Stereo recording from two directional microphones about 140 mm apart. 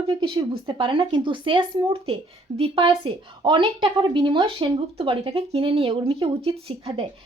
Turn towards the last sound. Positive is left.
turn(degrees=-40)  # may be behind; listen again after turning